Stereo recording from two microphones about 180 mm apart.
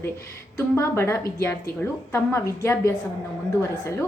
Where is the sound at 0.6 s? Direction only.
15° left (ahead or behind).